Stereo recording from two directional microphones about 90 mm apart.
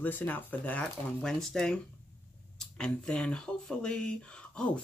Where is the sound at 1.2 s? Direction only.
5° left (ahead or behind).